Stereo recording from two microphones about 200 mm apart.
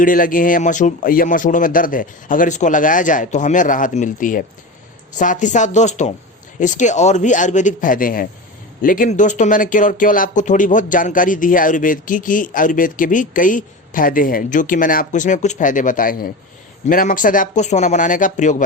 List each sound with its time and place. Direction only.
0.0 s speech: 45° left (ahead or behind)